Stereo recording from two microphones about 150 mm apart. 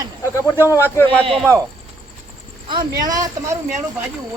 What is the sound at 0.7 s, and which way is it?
Speech, 15° left (ahead or behind).